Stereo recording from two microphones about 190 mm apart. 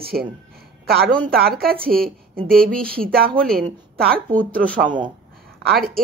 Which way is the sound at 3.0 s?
50° right (ahead or behind).